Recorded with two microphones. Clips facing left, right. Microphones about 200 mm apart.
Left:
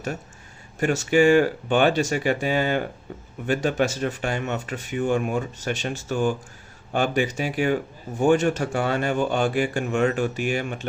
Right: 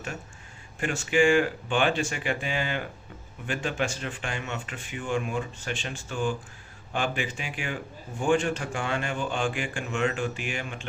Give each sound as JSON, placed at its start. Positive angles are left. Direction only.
{"t": 0.8, "sound": "speech", "side_deg": 40}